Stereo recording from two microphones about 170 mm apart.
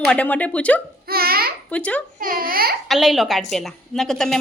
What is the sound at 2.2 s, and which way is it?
Babbling, 55° right (ahead or behind).